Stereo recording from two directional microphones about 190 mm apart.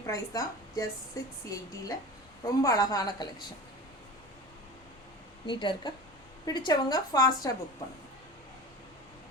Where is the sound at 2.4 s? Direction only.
15° left (ahead or behind).